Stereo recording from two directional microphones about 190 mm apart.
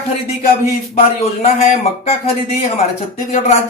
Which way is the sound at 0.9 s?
35° left (ahead or behind).